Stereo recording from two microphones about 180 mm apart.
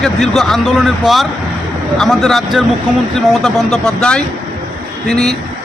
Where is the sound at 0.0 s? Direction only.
Centre (ahead or behind).